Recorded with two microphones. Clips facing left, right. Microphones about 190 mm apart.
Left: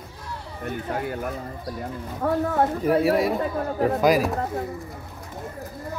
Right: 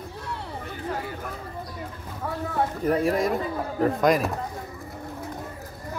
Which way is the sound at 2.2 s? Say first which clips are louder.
Left 6 dB; 50° left (ahead or behind).